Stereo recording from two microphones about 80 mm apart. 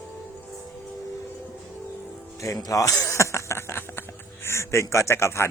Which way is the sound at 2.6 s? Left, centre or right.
Left.